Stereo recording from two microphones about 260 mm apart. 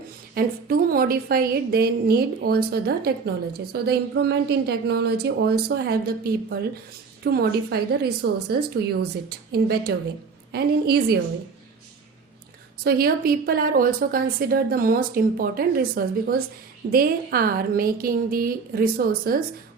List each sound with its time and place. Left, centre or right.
0.3 s a woman's voice: right
12.8 s a woman's voice: right